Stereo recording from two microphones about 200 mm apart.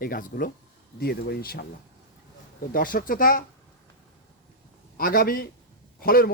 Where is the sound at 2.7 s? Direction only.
45° left (ahead or behind).